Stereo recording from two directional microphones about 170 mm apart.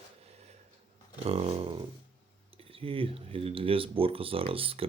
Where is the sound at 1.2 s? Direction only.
35° right (ahead or behind).